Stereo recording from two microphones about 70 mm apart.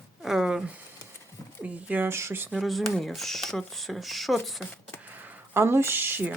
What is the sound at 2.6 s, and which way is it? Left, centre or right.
Speech, centre.